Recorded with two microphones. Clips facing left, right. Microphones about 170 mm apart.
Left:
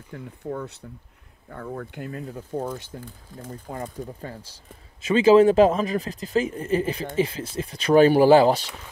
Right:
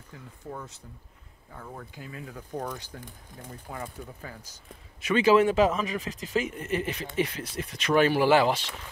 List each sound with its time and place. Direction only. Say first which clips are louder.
0.1 s speech: left 8 dB; 60° left (ahead or behind)
2.6 s speech: left 5 dB; 25° left (ahead or behind)
3.7 s speech: left 5 dB; 35° left (ahead or behind)